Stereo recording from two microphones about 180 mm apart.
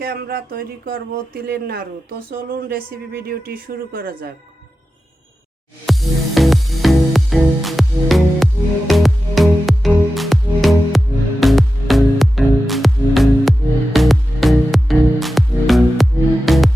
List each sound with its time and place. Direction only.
0.0 s speech: 60° right (ahead or behind)
5.8 s music: centre (ahead or behind)